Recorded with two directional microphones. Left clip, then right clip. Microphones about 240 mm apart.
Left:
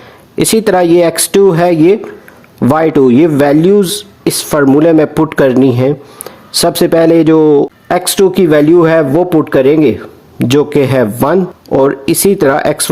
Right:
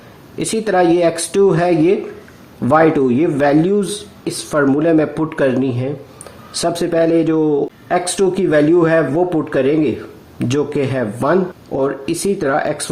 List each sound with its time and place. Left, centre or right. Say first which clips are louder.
0.3 s speech: left 6 dB; left